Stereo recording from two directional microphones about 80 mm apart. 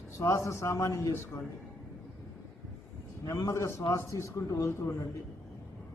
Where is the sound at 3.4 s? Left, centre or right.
Left.